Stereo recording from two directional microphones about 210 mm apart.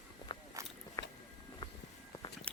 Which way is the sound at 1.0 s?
15° left (ahead or behind).